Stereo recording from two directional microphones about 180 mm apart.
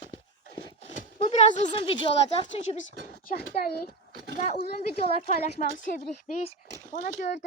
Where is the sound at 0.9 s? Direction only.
40° left (ahead or behind).